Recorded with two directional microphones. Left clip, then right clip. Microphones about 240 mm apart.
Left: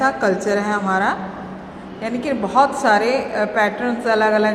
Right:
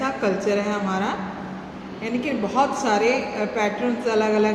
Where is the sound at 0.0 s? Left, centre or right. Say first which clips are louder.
Left 5 dB; left.